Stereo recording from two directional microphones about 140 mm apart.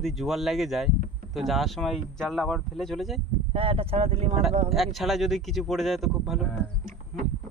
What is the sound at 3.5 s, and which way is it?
Speech, 40° right (ahead or behind).